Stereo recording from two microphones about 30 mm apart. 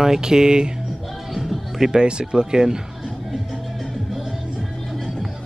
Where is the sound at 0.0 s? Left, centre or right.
Centre.